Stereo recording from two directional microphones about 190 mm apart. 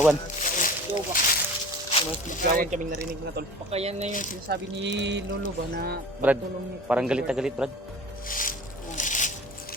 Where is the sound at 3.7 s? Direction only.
35° right (ahead or behind).